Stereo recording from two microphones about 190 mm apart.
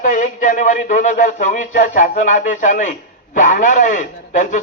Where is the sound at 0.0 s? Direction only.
40° left (ahead or behind).